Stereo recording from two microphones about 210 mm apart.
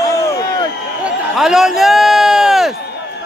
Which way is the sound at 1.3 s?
Centre (ahead or behind).